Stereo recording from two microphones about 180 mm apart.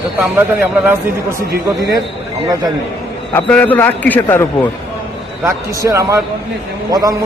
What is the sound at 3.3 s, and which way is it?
A man's voice, 10° left (ahead or behind).